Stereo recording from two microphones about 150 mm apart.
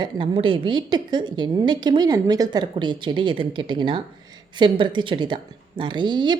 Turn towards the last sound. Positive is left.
turn(degrees=-30)  # may be behind; listen again after turning